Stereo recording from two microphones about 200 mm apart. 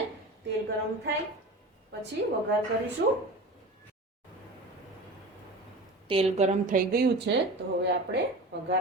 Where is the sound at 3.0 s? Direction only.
50° right (ahead or behind).